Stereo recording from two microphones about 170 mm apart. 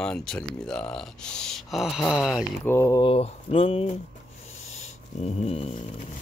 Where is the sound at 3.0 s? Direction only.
35° left (ahead or behind).